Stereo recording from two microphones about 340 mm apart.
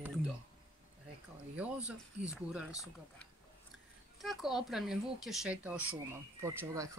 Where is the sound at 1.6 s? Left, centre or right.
Centre.